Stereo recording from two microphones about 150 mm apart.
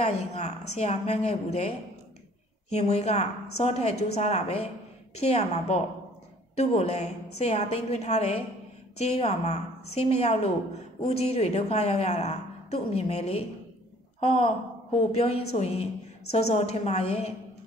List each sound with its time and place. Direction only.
0.0 s a woman's voice: 45° left (ahead or behind)